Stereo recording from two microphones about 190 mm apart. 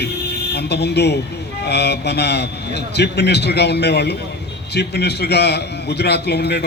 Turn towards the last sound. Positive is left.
turn(degrees=60)  # may be behind; listen again after turning